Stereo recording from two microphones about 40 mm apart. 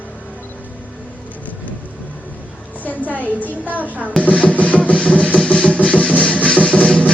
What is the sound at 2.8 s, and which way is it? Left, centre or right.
Music, left.